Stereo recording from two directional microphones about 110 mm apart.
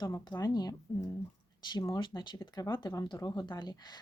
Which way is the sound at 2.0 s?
45° left (ahead or behind).